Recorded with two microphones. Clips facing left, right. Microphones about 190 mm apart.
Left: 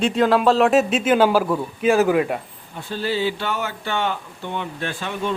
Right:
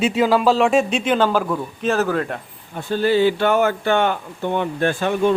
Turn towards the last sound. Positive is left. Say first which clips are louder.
# right 8 dB
turn(degrees=-50)  # may be behind; listen again after turning